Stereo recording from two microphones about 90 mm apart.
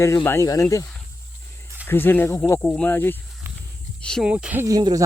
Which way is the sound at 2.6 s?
15° left (ahead or behind).